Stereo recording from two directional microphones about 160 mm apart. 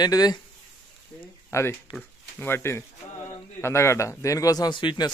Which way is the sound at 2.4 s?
15° left (ahead or behind).